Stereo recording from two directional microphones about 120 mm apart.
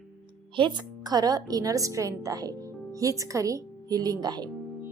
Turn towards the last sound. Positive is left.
turn(degrees=-35)  # may be behind; listen again after turning